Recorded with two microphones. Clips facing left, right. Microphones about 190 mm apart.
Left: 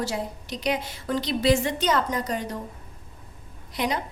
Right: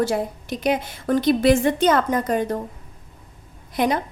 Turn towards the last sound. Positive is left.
turn(degrees=-55)  # may be behind; listen again after turning